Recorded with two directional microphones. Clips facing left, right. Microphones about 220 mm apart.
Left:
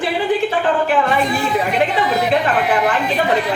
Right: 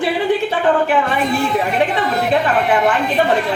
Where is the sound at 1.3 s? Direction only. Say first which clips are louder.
Right 1 dB; centre (ahead or behind).